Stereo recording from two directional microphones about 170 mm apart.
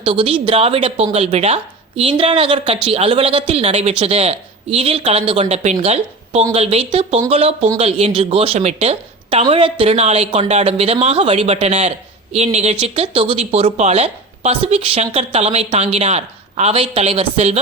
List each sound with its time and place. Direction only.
0.0 s a woman's voice: 35° right (ahead or behind)